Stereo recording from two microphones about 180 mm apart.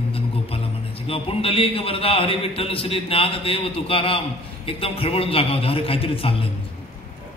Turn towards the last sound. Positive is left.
turn(degrees=30)  # may be behind; listen again after turning